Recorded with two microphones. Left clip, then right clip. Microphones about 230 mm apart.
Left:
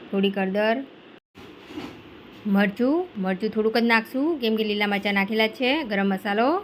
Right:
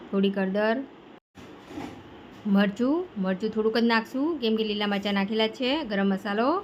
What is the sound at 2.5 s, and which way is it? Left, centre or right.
Speech, centre.